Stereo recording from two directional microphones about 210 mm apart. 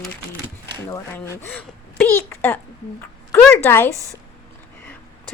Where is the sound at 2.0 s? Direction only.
10° left (ahead or behind).